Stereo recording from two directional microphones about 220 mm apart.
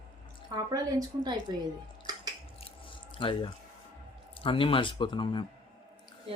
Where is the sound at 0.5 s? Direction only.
20° right (ahead or behind).